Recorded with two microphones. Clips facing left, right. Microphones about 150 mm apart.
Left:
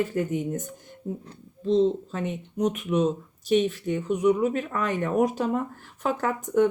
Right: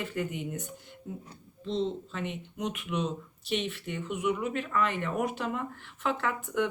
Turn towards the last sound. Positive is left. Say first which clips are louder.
# left 8 dB
turn(degrees=40)  # may be behind; listen again after turning